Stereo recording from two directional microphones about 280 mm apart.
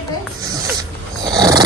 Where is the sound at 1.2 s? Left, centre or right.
Centre.